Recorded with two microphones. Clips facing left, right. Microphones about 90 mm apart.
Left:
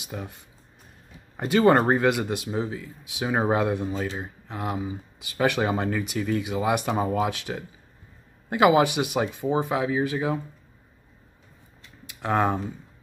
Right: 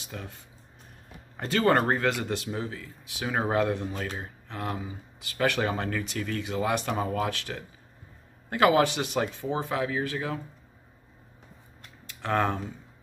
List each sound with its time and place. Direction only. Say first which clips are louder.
0.0 s speech: left 4 dB; 15° left (ahead or behind)
1.3 s a man's voice: left 5 dB; 15° left (ahead or behind)
12.1 s speech: left 3 dB; 15° left (ahead or behind)